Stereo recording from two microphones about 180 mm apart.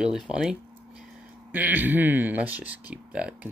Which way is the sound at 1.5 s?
10° right (ahead or behind).